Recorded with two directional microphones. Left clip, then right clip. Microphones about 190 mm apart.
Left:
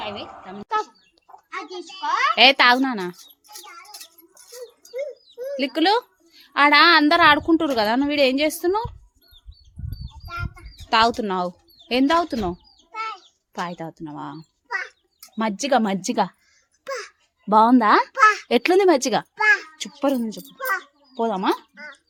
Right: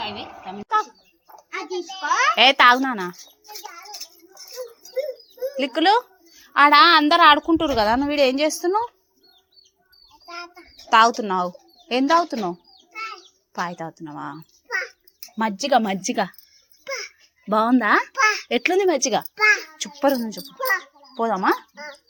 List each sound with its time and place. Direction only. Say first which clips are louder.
0.4 s a child's voice: right 3 dB; 30° left (ahead or behind)
5.5 s a child's voice: right 2 dB; 15° left (ahead or behind)
10.8 s speech: right 3 dB; 15° left (ahead or behind)
13.5 s a child's voice: right 2 dB; 20° left (ahead or behind)
18.4 s speech: left 3 dB; 30° left (ahead or behind)
19.4 s a child's voice: even; centre (ahead or behind)
19.8 s a child's voice: right 2 dB; 15° left (ahead or behind)